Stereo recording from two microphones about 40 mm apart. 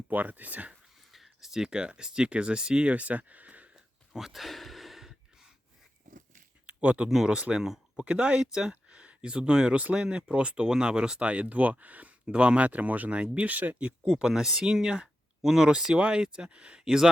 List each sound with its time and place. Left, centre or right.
0.1 s speech: right
1.1 s a sound: centre; by 2.0 s right
2.0 s speech: right
2.9 s speech: right
4.1 s a sound: centre
6.8 s speech: right
7.5 s speech: centre
8.0 s speech: right
8.7 s a sound: right
9.9 s speech: right
13.5 s speech: right
14.0 s speech: centre
16.5 s speech: right
16.8 s speech: centre